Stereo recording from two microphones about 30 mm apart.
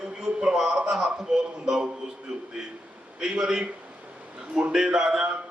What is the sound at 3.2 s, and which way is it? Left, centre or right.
Speech, right.